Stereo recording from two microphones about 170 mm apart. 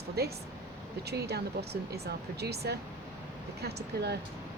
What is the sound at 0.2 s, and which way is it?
Speech, 70° right (ahead or behind).